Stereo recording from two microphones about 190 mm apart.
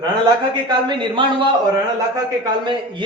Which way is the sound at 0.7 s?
25° right (ahead or behind).